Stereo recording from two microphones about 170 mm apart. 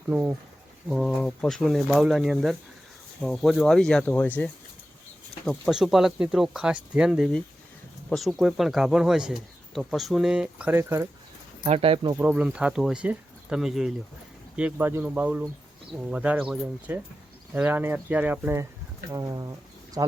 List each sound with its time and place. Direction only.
0.1 s speech: 10° right (ahead or behind)
0.9 s speech: centre (ahead or behind)
11.6 s speech: 35° right (ahead or behind)
12.1 s speech: 10° right (ahead or behind)